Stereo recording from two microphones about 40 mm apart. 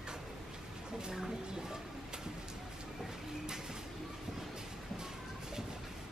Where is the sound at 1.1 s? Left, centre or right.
Centre.